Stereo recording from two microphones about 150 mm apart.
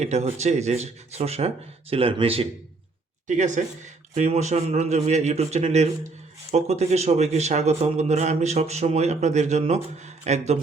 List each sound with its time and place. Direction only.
0.0 s speech: 45° right (ahead or behind)
3.2 s speech: 55° right (ahead or behind)